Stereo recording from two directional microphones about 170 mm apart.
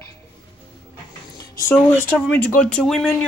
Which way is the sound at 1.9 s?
10° right (ahead or behind).